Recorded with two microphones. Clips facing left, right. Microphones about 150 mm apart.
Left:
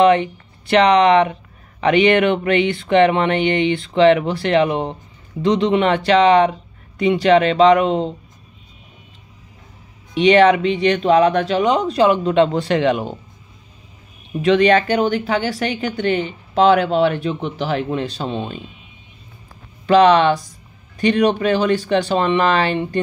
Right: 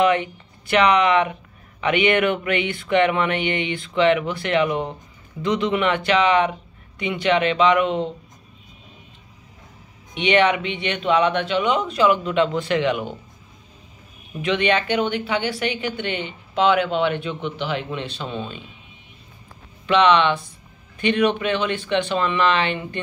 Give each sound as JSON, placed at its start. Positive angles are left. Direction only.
{"t": 0.0, "sound": "a woman's voice", "side_deg": 35}
{"t": 10.1, "sound": "a woman's voice", "side_deg": 35}
{"t": 14.4, "sound": "a woman's voice", "side_deg": 40}
{"t": 19.9, "sound": "a woman's voice", "side_deg": 40}